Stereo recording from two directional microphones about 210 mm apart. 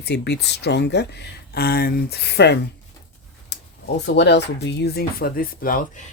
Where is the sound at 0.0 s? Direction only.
55° left (ahead or behind).